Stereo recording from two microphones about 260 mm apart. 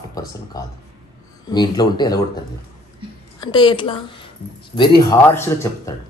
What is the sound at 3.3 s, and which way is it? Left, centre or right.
Speech, centre.